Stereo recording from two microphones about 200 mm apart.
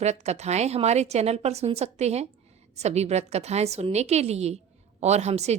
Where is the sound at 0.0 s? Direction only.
35° right (ahead or behind).